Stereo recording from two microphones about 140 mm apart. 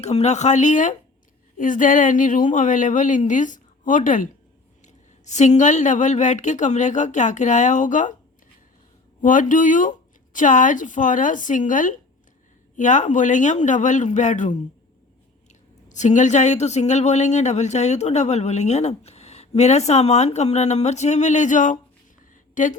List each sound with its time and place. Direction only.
0.0 s a woman's voice: 50° left (ahead or behind)
9.2 s a woman's voice: 70° left (ahead or behind)
15.9 s speech: 60° left (ahead or behind)